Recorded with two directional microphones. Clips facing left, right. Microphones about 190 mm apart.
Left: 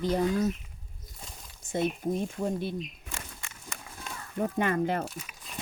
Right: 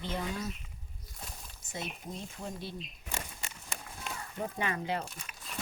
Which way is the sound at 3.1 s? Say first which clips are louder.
Right 2 dB; 20° right (ahead or behind).